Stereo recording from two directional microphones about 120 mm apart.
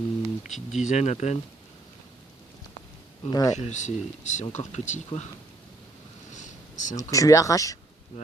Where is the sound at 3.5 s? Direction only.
80° left.